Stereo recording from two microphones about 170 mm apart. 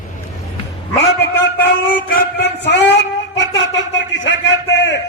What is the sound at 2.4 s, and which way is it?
Speech, 85° left.